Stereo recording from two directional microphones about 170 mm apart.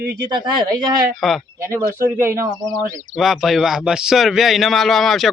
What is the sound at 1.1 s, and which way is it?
Speech, centre (ahead or behind).